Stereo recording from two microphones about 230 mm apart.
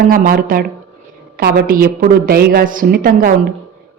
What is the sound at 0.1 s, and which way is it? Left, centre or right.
A woman's voice, right.